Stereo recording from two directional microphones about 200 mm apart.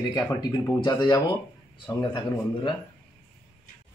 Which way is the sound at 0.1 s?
20° left (ahead or behind).